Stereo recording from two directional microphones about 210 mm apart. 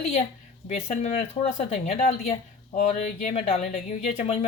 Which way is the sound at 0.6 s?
30° left (ahead or behind).